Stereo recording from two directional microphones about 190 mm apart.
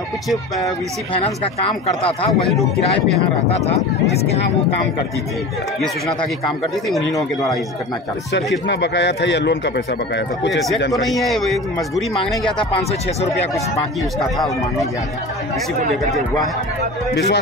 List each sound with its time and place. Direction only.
0.6 s speech: 20° left (ahead or behind)
1.2 s speech: 30° left (ahead or behind)
3.4 s speech: 35° left (ahead or behind)
8.6 s speech: 65° left (ahead or behind)
11.0 s a man's voice: centre (ahead or behind)
17.1 s a man's voice: 65° left (ahead or behind)